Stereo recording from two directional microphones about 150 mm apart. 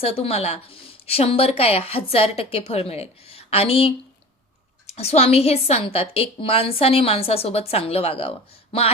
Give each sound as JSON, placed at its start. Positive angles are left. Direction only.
{"t": 0.0, "sound": "a woman's voice", "side_deg": 40}